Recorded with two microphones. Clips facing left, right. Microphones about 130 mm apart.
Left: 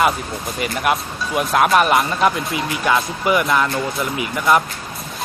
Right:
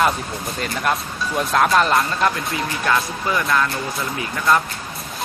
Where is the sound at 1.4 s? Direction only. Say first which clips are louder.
Left 2 dB; 10° left (ahead or behind).